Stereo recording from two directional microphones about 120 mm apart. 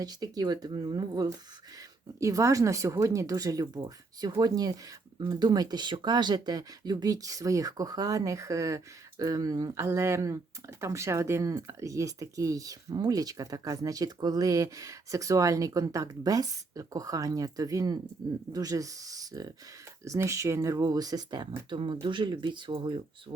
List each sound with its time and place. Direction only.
0.0 s speech: 35° right (ahead or behind)